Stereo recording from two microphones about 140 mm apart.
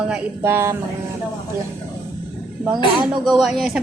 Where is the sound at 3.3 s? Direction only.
5° right (ahead or behind).